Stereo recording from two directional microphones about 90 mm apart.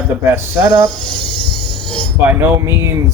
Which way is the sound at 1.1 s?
70° left (ahead or behind).